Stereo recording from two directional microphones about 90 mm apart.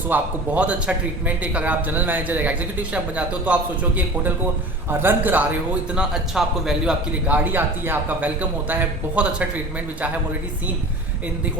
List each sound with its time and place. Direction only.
0.1 s speech: 15° right (ahead or behind)
7.3 s speech: 15° right (ahead or behind)